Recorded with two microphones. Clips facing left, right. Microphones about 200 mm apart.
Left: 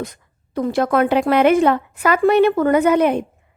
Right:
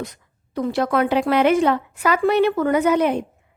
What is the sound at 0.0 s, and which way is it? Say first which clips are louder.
A woman's voice: left 2 dB; 50° left (ahead or behind).